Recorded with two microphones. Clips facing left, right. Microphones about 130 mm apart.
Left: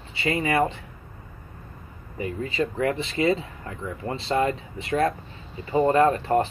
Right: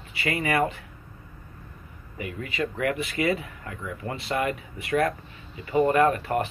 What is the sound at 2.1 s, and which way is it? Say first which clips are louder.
Speech: left 4 dB; 30° left (ahead or behind).